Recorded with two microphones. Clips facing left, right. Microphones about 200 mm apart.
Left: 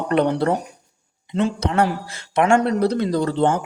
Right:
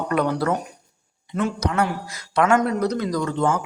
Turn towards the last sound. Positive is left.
turn(degrees=35)  # may be behind; listen again after turning